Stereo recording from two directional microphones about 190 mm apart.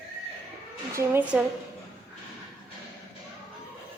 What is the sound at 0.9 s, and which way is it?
Speech, 10° right (ahead or behind).